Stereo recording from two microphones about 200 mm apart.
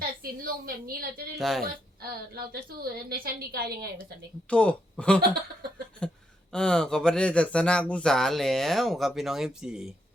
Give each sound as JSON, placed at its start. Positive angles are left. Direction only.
{"t": 0.0, "sound": "a woman's voice", "side_deg": -45}
{"t": 1.4, "sound": "speech", "side_deg": 0}
{"t": 1.6, "sound": "a woman's voice", "side_deg": -50}
{"t": 4.4, "sound": "speech", "side_deg": 5}
{"t": 6.5, "sound": "speech", "side_deg": 5}